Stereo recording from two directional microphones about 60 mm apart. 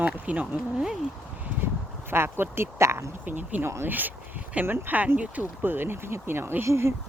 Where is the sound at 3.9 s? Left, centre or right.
Right.